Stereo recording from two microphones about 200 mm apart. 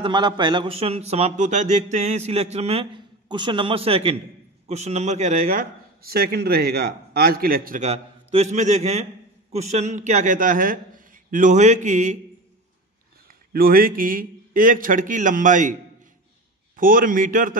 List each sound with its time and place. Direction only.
0.0 s a man's voice: 20° right (ahead or behind); by 12.2 s 35° right (ahead or behind)
13.5 s a man's voice: 45° right (ahead or behind)
16.7 s a man's voice: 45° right (ahead or behind)